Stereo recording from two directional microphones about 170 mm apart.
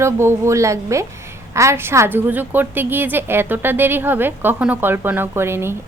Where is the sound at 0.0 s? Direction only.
15° right (ahead or behind).